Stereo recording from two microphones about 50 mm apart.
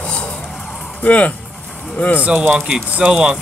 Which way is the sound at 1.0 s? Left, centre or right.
Left.